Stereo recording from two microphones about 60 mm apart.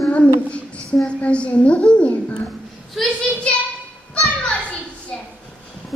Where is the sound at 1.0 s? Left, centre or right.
Centre.